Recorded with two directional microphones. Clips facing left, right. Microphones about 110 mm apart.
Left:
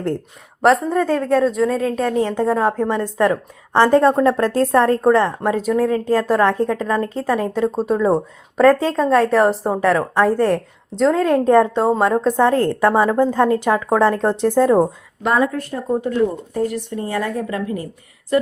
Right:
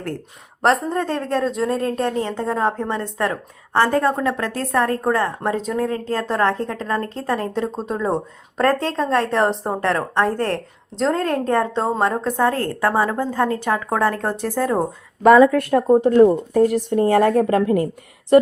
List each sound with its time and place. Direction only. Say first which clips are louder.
0.6 s speech: left 3 dB; centre (ahead or behind)
2.1 s a woman's voice: left 5 dB; 10° left (ahead or behind); by 4.9 s 30° left (ahead or behind)
5.4 s speech: left 4 dB; 5° left (ahead or behind)
5.9 s a woman's voice: left 6 dB; 15° left (ahead or behind)
11.4 s a woman's voice: left 6 dB; 15° left (ahead or behind)
15.3 s speech: right 7 dB; 60° right (ahead or behind)
15.9 s speech: right 6 dB; 40° right (ahead or behind)
16.2 s a woman's voice: right 6 dB; 50° right (ahead or behind)